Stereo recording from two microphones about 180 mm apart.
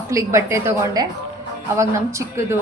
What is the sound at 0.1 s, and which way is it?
Speech, 15° right (ahead or behind).